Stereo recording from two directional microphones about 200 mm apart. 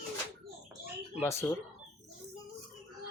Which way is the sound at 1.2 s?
15° left (ahead or behind).